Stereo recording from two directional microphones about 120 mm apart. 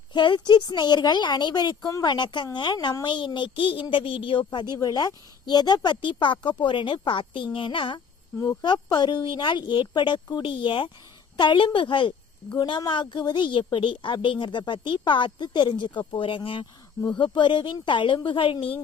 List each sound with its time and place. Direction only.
0.1 s a woman's voice: 40° left (ahead or behind)